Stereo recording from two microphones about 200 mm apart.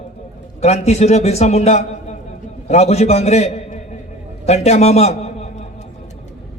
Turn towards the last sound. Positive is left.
turn(degrees=35)  # may be behind; listen again after turning